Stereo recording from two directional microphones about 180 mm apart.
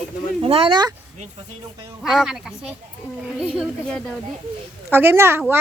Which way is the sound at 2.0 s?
5° right (ahead or behind).